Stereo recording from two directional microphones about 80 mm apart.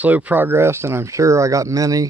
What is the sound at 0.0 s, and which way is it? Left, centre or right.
Speech, centre.